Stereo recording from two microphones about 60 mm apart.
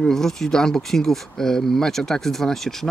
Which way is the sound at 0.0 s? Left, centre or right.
Centre.